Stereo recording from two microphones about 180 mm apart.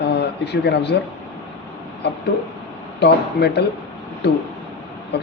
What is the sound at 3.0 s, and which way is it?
Speech, 70° left (ahead or behind).